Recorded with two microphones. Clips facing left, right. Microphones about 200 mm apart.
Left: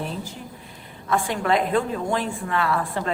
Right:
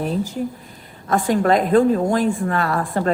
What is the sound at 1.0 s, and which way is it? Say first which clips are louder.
A woman's voice: right 6 dB; 40° right (ahead or behind).